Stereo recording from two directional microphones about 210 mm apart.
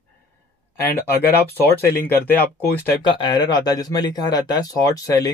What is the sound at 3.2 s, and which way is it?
Speech, 20° left (ahead or behind).